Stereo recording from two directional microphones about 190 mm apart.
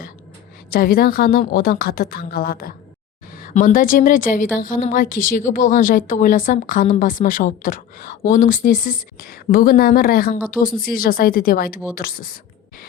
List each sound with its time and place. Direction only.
0.7 s a woman's voice: 50° left (ahead or behind)